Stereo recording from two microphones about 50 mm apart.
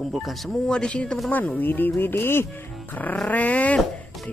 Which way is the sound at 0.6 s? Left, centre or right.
Centre.